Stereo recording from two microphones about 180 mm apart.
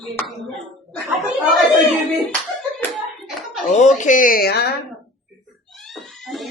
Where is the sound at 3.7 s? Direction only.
40° left (ahead or behind); by 4.7 s 60° left (ahead or behind).